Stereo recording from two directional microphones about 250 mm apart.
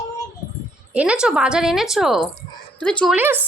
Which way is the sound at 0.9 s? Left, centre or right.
Centre.